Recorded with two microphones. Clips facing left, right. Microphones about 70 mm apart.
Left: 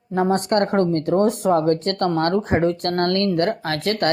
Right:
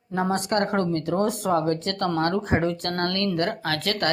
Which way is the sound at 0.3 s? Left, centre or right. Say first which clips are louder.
Left 4 dB; left.